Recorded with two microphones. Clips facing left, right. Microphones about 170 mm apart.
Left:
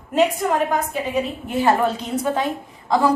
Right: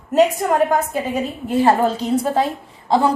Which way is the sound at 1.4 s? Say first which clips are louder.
Right 4 dB; 35° right (ahead or behind).